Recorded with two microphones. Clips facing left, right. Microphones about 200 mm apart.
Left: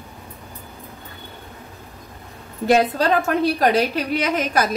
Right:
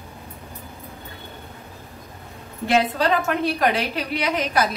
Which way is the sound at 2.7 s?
40° left (ahead or behind).